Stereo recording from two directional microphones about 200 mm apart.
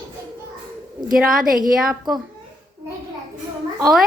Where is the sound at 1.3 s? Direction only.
45° right (ahead or behind).